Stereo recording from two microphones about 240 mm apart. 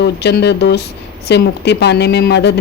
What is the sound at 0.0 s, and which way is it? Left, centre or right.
A woman's voice, left.